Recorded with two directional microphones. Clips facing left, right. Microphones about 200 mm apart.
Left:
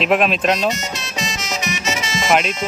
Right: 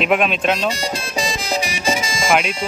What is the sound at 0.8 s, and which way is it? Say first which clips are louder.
Music: right 4 dB; 35° right (ahead or behind).